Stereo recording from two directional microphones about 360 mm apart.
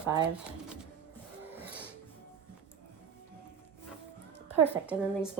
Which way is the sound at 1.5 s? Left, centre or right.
Centre.